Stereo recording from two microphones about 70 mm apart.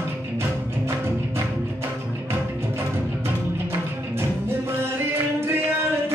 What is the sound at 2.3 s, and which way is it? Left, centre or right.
Music, right.